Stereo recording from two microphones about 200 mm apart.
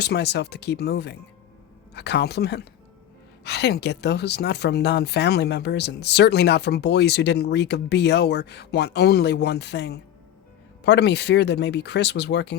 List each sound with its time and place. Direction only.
0.0 s speech: 55° left (ahead or behind)